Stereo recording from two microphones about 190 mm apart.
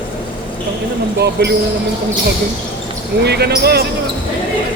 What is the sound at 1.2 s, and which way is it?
Speech, 60° right (ahead or behind).